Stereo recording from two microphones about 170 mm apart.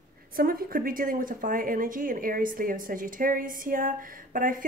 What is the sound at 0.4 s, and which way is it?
Speech, 60° right (ahead or behind).